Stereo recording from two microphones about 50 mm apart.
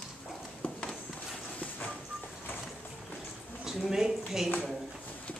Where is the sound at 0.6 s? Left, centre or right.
Left.